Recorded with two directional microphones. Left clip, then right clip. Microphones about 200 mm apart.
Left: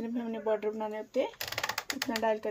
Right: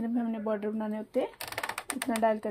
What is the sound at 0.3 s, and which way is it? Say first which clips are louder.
Speech: left 1 dB; 45° right (ahead or behind).